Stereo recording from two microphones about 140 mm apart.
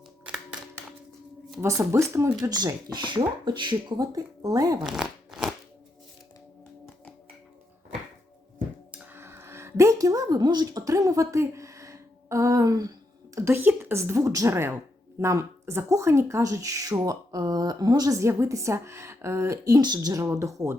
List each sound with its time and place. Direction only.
1.6 s speech: 20° right (ahead or behind)
4.8 s shuffling cards: 5° right (ahead or behind)
8.9 s a sound: 15° right (ahead or behind)
15.2 s speech: 20° right (ahead or behind)